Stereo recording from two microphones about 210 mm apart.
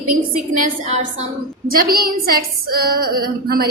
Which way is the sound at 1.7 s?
45° right (ahead or behind).